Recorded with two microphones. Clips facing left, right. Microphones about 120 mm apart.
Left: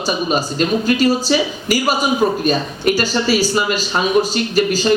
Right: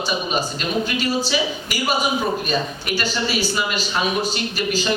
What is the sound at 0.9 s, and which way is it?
Speech, 40° left (ahead or behind).